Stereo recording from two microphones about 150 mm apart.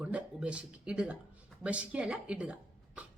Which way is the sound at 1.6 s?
10° right (ahead or behind).